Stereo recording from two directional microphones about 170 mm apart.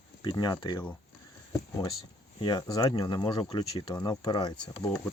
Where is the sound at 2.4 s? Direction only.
25° left (ahead or behind).